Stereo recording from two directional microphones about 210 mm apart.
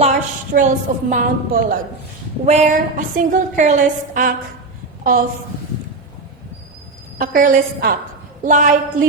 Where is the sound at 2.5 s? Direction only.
35° right (ahead or behind).